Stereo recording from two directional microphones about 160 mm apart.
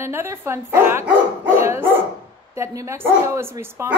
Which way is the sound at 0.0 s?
15° right (ahead or behind).